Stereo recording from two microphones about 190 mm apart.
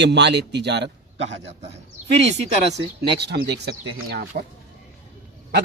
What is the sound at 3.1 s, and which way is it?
Speech, 60° right (ahead or behind).